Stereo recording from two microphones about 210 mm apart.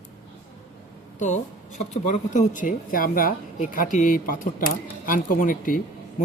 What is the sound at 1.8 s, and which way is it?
A man's voice, 35° left (ahead or behind).